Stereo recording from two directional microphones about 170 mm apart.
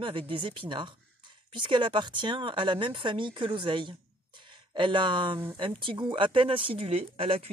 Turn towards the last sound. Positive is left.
turn(degrees=-35)  # may be behind; listen again after turning